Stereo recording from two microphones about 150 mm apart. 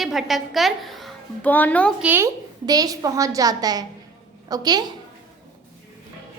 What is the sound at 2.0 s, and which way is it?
Speech, 15° right (ahead or behind).